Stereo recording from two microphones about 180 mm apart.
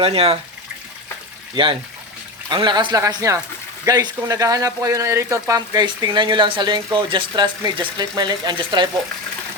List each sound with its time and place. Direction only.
0.0 s speech: 30° right (ahead or behind)
2.5 s speech: 25° right (ahead or behind)